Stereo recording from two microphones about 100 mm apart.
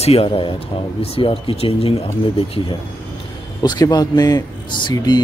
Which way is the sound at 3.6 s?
45° left (ahead or behind).